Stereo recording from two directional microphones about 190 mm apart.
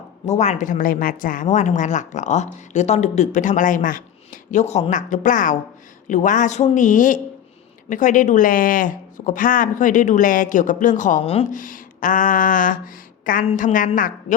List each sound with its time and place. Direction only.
0.3 s a woman's voice: 40° left (ahead or behind)